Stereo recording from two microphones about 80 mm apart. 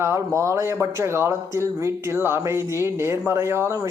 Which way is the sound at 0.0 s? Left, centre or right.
Right.